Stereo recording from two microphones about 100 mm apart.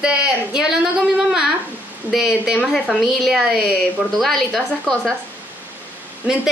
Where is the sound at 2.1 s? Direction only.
5° right (ahead or behind).